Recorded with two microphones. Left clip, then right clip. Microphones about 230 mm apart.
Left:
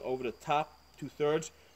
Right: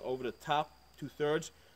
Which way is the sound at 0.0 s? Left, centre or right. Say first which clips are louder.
Left 2 dB; centre.